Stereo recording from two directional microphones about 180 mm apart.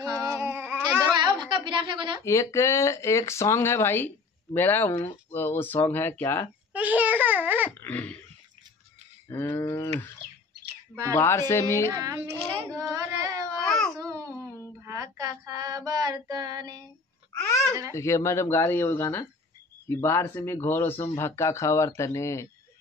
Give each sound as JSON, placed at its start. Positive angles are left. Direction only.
{"t": 0.0, "sound": "music", "side_deg": -20}
{"t": 1.4, "sound": "a woman's voice", "side_deg": -25}
{"t": 2.2, "sound": "speech", "side_deg": 15}
{"t": 6.7, "sound": "babbling", "side_deg": -10}
{"t": 7.8, "sound": "dog", "side_deg": 10}
{"t": 9.3, "sound": "speech", "side_deg": 15}
{"t": 11.1, "sound": "speech", "side_deg": 15}
{"t": 11.9, "sound": "a child's voice", "side_deg": -15}
{"t": 12.7, "sound": "singing", "side_deg": -15}
{"t": 13.7, "sound": "baby cry", "side_deg": 5}
{"t": 13.9, "sound": "babbling", "side_deg": -20}
{"t": 14.8, "sound": "child singing", "side_deg": -15}
{"t": 17.4, "sound": "a sound", "side_deg": 15}
{"t": 17.9, "sound": "speech", "side_deg": 15}